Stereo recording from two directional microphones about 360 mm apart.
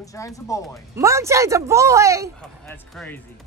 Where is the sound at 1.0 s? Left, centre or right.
Centre.